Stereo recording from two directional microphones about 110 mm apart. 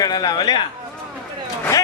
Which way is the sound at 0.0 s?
35° left (ahead or behind).